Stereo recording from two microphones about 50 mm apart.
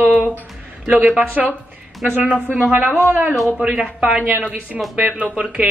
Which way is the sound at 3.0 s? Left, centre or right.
Right.